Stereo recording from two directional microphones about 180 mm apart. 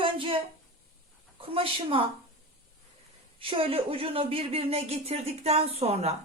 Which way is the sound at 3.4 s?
30° right (ahead or behind).